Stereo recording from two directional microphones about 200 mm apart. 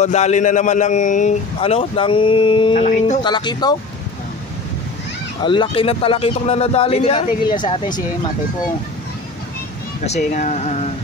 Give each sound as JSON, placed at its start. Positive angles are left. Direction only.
{"t": 0.0, "sound": "a man's voice", "side_deg": 35}
{"t": 2.8, "sound": "a man's voice", "side_deg": 40}
{"t": 3.3, "sound": "a man's voice", "side_deg": 20}
{"t": 5.4, "sound": "a man's voice", "side_deg": 25}
{"t": 10.0, "sound": "a man's voice", "side_deg": 35}